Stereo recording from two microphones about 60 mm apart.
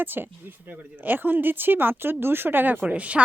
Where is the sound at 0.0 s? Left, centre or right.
Right.